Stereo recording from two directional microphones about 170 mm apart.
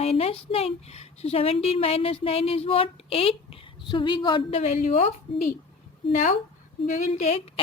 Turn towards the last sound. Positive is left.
turn(degrees=40)  # may be behind; listen again after turning